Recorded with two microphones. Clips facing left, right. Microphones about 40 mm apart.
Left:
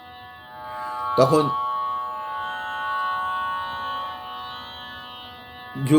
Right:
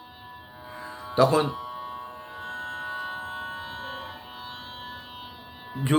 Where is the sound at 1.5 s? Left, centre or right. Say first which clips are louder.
Left 11 dB; left.